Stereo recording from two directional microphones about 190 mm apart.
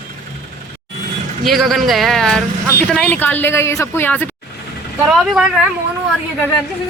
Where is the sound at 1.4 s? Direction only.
Centre (ahead or behind).